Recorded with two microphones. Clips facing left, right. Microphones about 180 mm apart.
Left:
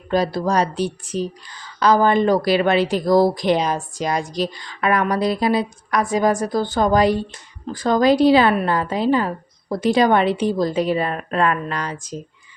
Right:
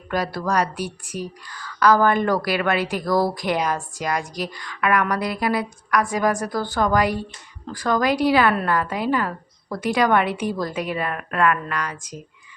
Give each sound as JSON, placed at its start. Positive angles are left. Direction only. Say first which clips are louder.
{"t": 0.1, "sound": "speech", "louder": "left 4 dB", "side_deg": 25}